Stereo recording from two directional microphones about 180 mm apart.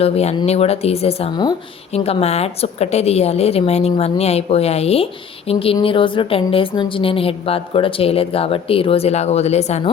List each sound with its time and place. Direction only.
0.0 s a woman's voice: 35° left (ahead or behind)